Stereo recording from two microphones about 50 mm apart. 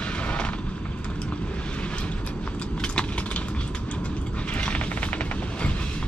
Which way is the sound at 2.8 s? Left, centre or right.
Left.